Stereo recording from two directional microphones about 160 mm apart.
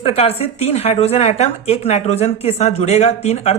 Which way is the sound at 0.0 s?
40° left (ahead or behind).